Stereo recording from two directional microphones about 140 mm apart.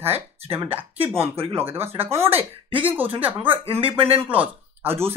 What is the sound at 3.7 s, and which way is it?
Speech, 40° right (ahead or behind).